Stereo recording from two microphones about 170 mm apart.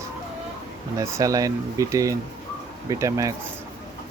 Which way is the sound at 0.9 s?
20° right (ahead or behind).